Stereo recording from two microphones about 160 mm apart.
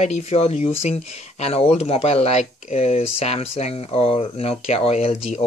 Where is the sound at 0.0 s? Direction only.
40° left (ahead or behind).